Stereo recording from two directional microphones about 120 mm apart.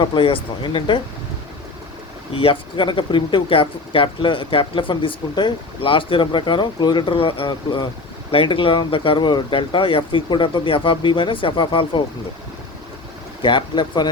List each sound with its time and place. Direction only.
0.0 s speech: 45° left (ahead or behind)
2.3 s speech: 50° left (ahead or behind)
13.4 s speech: 40° left (ahead or behind)